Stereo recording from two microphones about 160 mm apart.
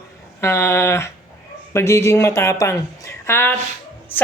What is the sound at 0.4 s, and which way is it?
Speech, 15° left (ahead or behind).